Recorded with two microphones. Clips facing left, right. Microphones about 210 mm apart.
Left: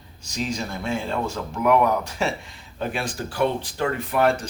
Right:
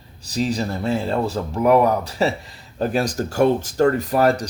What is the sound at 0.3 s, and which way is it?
Speech, 35° right (ahead or behind).